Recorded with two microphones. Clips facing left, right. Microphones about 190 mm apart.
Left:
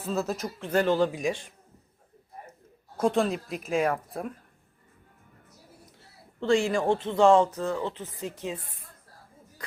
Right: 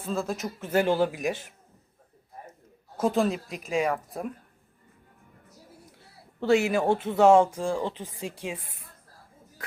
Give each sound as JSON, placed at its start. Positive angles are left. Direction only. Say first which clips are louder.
{"t": 0.1, "sound": "a man's voice", "louder": "even", "side_deg": 5}
{"t": 3.0, "sound": "a man's voice", "louder": "even", "side_deg": 0}
{"t": 6.4, "sound": "speech", "louder": "right 1 dB", "side_deg": -5}